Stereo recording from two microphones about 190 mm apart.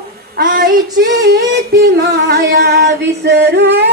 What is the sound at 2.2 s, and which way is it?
Singing, 60° right (ahead or behind).